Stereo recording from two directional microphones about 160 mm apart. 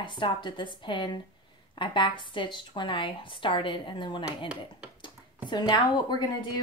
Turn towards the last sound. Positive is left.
turn(degrees=25)  # may be behind; listen again after turning